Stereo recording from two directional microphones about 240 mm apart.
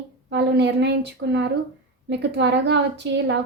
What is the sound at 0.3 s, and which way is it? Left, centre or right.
A woman's voice, right.